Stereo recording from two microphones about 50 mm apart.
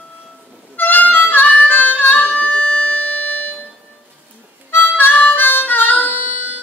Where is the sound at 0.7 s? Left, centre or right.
Left.